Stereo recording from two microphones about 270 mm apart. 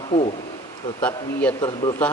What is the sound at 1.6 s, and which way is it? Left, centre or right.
Speech, centre.